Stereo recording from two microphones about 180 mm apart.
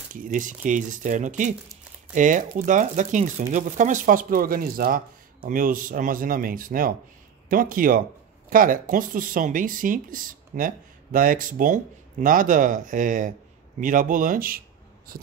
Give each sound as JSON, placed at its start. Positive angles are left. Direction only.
{"t": 0.1, "sound": "speech", "side_deg": -50}